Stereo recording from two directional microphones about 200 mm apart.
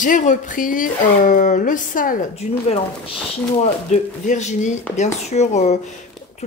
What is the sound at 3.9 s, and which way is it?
Speech, 35° left (ahead or behind).